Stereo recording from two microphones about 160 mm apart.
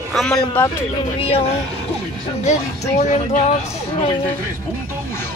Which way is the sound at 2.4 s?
45° left (ahead or behind).